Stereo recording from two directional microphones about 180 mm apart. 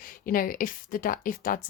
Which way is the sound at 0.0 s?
50° left (ahead or behind).